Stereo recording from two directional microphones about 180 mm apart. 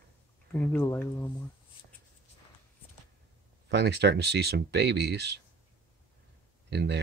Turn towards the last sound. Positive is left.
turn(degrees=-70)  # may be behind; listen again after turning